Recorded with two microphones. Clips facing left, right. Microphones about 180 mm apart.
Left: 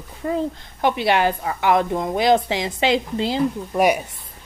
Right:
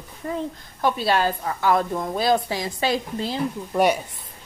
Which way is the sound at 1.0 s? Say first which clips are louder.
Left 3 dB; 15° left (ahead or behind).